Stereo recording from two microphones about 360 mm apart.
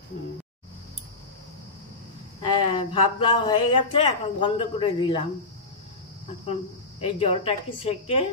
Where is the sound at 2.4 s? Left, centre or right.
Centre.